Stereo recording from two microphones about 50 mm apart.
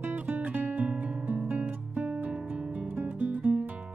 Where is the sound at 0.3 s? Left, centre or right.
Right.